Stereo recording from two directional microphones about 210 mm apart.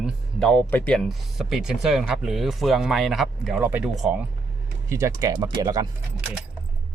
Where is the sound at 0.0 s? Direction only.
Centre (ahead or behind); by 5.9 s 20° right (ahead or behind).